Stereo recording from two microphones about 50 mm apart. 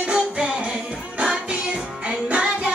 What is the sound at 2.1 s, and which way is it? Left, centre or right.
Music, right.